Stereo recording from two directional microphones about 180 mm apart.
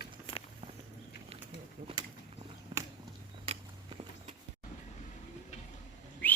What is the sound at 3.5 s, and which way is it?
Walk, 30° right (ahead or behind).